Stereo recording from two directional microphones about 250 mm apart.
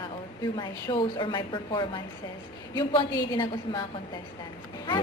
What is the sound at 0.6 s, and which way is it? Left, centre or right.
A woman's voice, centre.